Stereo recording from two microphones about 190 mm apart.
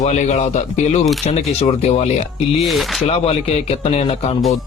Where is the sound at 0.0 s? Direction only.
35° left (ahead or behind).